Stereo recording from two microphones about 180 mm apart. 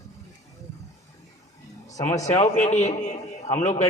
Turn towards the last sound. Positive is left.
turn(degrees=40)  # may be behind; listen again after turning